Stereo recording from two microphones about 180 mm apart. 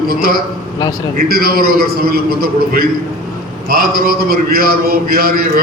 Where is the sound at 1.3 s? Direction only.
55° right (ahead or behind).